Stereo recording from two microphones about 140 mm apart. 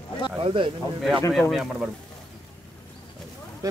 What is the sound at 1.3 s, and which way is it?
Speech, centre (ahead or behind).